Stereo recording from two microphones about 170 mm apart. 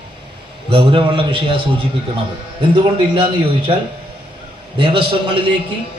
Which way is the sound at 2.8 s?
30° right (ahead or behind).